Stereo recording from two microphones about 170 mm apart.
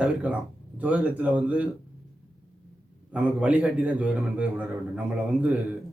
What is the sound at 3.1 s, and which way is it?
A man's voice, 5° right (ahead or behind).